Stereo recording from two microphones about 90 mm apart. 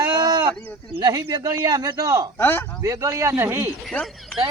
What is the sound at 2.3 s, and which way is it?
Speech, 25° left (ahead or behind).